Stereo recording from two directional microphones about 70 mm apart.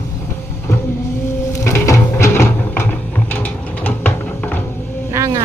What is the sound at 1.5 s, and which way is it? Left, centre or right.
Music, left.